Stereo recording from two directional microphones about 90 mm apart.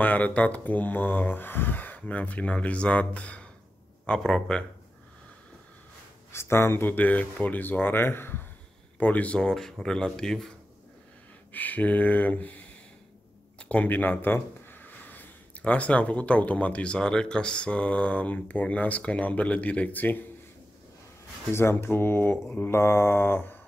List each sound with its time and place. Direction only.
0.0 s speech: 15° left (ahead or behind)
6.3 s speech: 30° left (ahead or behind); by 10.5 s 5° left (ahead or behind)
11.5 s speech: 20° left (ahead or behind)
21.5 s speech: 25° left (ahead or behind)